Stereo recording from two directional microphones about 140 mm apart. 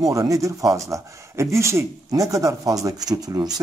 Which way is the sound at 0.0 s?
25° right (ahead or behind).